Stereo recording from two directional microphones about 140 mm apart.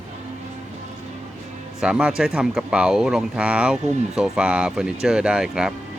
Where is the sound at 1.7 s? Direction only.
5° right (ahead or behind).